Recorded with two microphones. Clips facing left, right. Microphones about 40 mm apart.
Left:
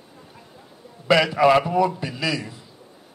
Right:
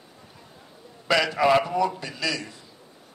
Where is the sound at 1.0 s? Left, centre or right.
Centre.